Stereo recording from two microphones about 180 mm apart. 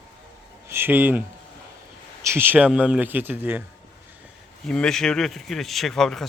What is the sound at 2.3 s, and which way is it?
Speech, 10° right (ahead or behind).